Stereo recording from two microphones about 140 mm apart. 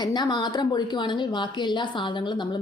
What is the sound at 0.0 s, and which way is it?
A woman's voice, 30° left (ahead or behind).